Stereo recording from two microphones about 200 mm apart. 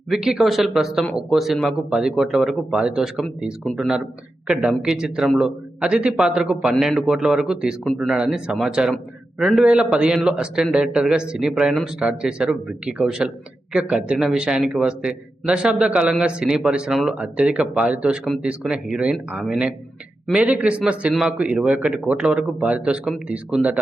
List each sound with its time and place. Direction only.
0.1 s speech: 5° right (ahead or behind)